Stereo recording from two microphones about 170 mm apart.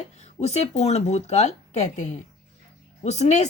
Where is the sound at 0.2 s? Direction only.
40° left (ahead or behind).